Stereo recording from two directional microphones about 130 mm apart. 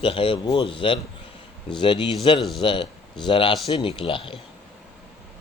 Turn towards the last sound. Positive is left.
turn(degrees=40)  # may be behind; listen again after turning